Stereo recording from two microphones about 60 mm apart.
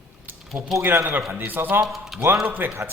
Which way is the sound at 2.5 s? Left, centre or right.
Right.